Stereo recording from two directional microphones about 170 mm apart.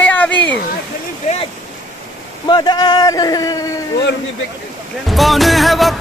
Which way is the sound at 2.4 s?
25° left (ahead or behind).